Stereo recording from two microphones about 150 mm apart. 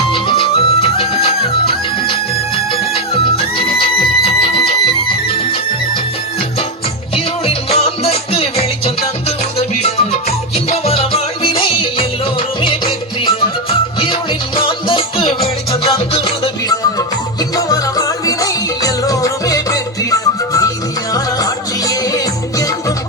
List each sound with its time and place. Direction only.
0.1 s music: 35° left (ahead or behind)
3.6 s music: 40° left (ahead or behind)
7.4 s music: 45° left (ahead or behind)
13.4 s music: 35° left (ahead or behind)
17.7 s music: 25° left (ahead or behind)